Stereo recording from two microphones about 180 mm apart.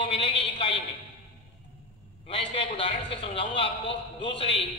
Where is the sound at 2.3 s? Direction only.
35° left (ahead or behind).